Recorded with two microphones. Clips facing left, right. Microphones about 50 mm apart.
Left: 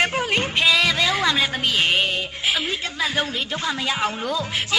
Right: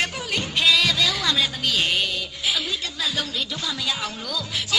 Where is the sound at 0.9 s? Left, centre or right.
Left.